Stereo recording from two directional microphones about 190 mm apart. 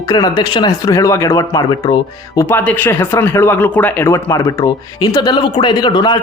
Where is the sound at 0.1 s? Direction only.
20° left (ahead or behind).